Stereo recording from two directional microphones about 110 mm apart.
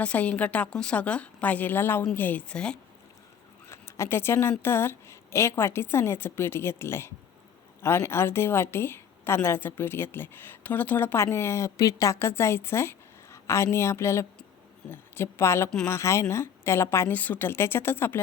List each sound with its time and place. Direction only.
0.0 s a woman's voice: 10° left (ahead or behind)
3.7 s a woman's voice: 25° left (ahead or behind)